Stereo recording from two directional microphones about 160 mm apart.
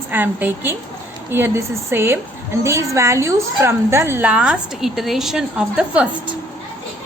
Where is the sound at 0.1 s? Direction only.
10° right (ahead or behind).